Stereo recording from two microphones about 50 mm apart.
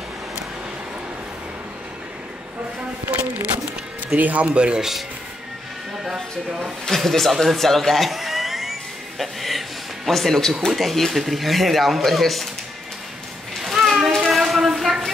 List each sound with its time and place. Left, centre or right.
4.2 s speech: right
4.6 s speech: centre
6.9 s speech: centre
9.2 s a sound: centre
10.7 s speech: centre
13.6 s a sound: centre